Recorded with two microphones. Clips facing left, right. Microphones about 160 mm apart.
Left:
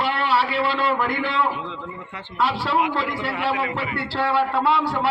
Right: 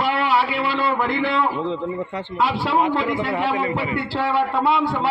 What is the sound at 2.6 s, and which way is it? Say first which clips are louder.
A man's voice: right 3 dB; 25° right (ahead or behind).